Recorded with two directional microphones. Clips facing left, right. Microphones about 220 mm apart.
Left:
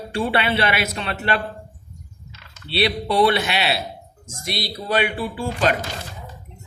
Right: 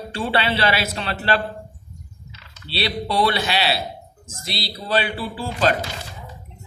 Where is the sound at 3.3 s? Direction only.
30° right (ahead or behind).